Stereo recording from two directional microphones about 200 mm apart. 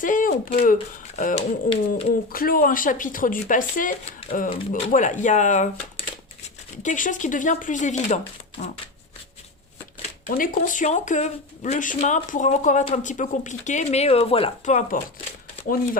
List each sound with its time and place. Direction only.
0.0 s speech: 40° left (ahead or behind)
10.0 s speech: 45° left (ahead or behind)